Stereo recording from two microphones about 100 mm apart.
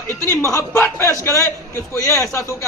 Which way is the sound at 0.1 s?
25° left (ahead or behind).